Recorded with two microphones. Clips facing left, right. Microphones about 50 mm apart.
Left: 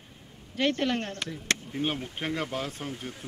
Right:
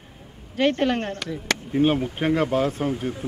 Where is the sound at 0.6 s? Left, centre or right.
Centre.